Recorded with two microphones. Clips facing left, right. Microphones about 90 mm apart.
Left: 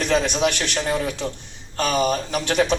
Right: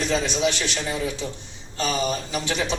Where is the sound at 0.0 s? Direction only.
55° left (ahead or behind).